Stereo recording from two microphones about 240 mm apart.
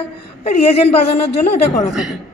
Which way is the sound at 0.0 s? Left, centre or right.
Left.